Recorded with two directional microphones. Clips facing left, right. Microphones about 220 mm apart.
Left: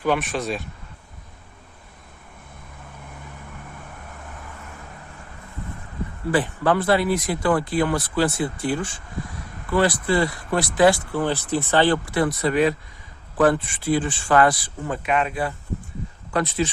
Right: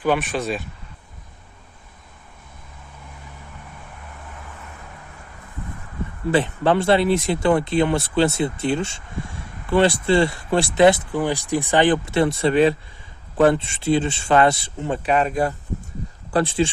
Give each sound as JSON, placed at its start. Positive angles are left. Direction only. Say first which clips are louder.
{"t": 0.0, "sound": "speech", "louder": "right 2 dB", "side_deg": 0}
{"t": 6.3, "sound": "speech", "louder": "right 2 dB", "side_deg": -25}
{"t": 16.3, "sound": "speech", "louder": "right 3 dB", "side_deg": -30}